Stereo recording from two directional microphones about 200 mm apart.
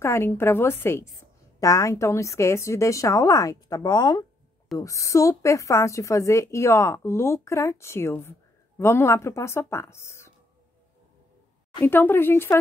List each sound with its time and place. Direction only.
0.0 s a woman's voice: 15° left (ahead or behind)
11.8 s a woman's voice: 10° left (ahead or behind)